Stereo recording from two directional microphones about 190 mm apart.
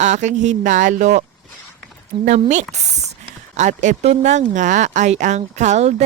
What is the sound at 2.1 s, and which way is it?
Speech, 25° right (ahead or behind).